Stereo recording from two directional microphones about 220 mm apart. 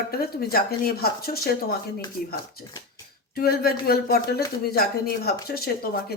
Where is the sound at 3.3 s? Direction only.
45° left (ahead or behind).